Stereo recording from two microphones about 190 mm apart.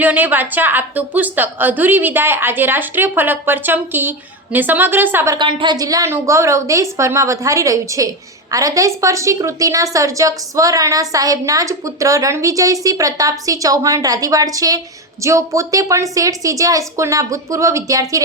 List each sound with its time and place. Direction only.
0.0 s a woman's voice: 10° right (ahead or behind)